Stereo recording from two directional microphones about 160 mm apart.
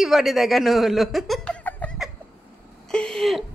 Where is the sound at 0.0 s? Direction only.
Centre (ahead or behind).